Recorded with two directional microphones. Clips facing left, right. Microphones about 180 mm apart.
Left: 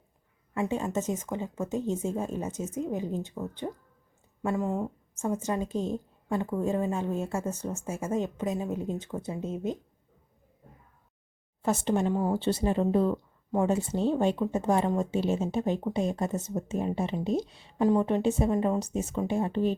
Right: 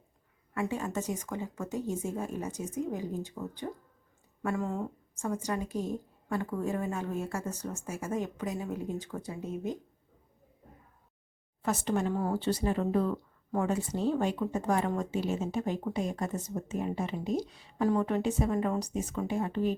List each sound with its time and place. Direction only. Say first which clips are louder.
0.5 s speech: left 4 dB; 25° left (ahead or behind)
11.6 s speech: left 3 dB; 25° left (ahead or behind)